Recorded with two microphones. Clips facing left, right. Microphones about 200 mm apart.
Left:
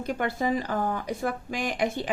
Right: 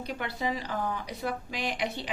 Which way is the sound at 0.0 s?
50° left (ahead or behind).